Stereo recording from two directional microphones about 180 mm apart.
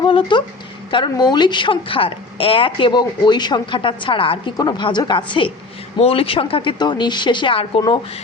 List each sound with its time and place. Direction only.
0.0 s a woman's voice: 25° left (ahead or behind)